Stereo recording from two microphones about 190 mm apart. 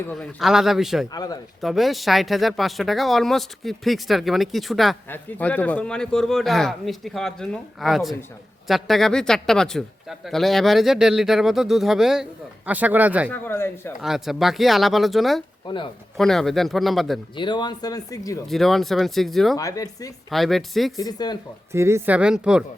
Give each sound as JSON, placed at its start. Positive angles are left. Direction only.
{"t": 0.0, "sound": "speech", "side_deg": 5}
{"t": 1.1, "sound": "speech", "side_deg": 20}
{"t": 1.6, "sound": "speech", "side_deg": 0}
{"t": 13.3, "sound": "speech", "side_deg": 10}
{"t": 14.0, "sound": "speech", "side_deg": 0}
{"t": 15.6, "sound": "speech", "side_deg": 25}
{"t": 16.1, "sound": "speech", "side_deg": 0}
{"t": 17.3, "sound": "speech", "side_deg": 25}
{"t": 18.4, "sound": "speech", "side_deg": 0}
{"t": 19.5, "sound": "speech", "side_deg": 20}
{"t": 20.3, "sound": "speech", "side_deg": 0}
{"t": 20.9, "sound": "speech", "side_deg": 20}
{"t": 21.7, "sound": "a woman's voice", "side_deg": -15}